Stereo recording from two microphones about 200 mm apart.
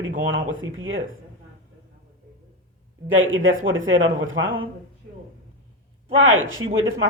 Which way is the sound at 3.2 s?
80° right.